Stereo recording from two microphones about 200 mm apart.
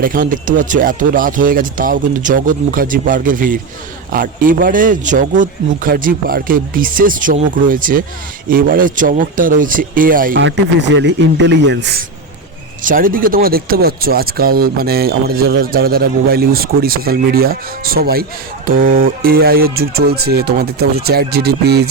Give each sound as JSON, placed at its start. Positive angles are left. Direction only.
{"t": 0.0, "sound": "speech", "side_deg": -45}
{"t": 10.3, "sound": "a man's voice", "side_deg": -60}
{"t": 12.8, "sound": "speech", "side_deg": -45}